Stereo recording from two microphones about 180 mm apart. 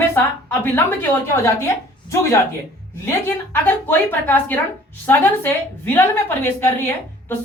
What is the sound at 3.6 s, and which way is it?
A woman's voice, 10° left (ahead or behind).